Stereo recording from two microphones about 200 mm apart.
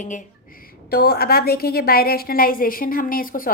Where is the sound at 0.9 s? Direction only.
50° left (ahead or behind).